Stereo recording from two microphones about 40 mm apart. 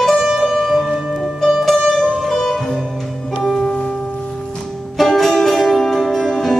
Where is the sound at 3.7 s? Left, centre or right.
Left.